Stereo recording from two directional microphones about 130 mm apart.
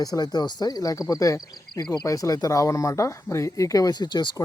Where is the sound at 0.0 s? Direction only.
30° left (ahead or behind).